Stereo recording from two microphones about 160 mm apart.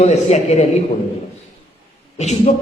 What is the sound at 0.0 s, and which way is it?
Speech, 45° left (ahead or behind).